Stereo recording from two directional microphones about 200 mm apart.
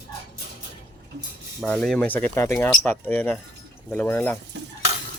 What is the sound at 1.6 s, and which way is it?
Speech, 5° left (ahead or behind).